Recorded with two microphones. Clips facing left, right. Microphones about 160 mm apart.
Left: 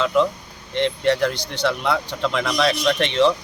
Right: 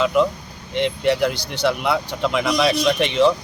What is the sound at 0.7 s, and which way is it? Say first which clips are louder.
Speech: even; 5° right (ahead or behind).